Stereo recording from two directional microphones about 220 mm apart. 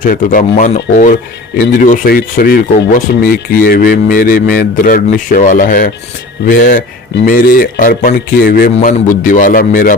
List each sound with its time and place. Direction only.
0.0 s speech: 40° left (ahead or behind)